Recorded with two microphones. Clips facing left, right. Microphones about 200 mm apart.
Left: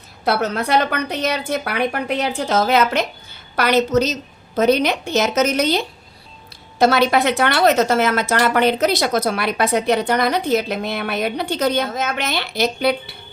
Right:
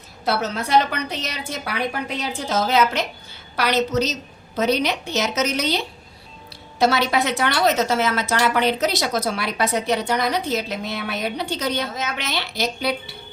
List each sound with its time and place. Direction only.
0.3 s a woman's voice: 60° left (ahead or behind)